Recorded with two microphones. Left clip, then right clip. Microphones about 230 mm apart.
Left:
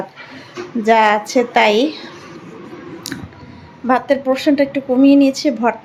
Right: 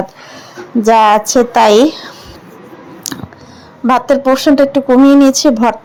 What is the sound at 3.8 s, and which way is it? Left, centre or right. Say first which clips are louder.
Speech: right 5 dB; right.